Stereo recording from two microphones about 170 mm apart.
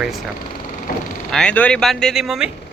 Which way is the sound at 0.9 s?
60° left (ahead or behind).